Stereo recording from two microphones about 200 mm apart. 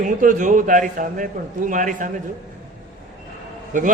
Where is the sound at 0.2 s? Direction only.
40° right (ahead or behind).